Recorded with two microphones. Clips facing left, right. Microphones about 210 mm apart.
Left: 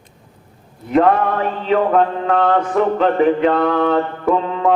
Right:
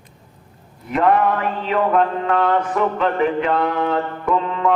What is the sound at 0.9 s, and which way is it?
Mantra, 35° left (ahead or behind).